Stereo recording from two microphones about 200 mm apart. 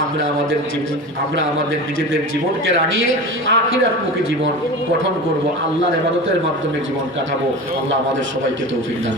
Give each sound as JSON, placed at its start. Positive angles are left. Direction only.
{"t": 3.4, "sound": "a man's voice", "side_deg": -70}